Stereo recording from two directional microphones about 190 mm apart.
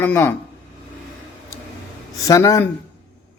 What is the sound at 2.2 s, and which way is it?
Speech, 15° left (ahead or behind).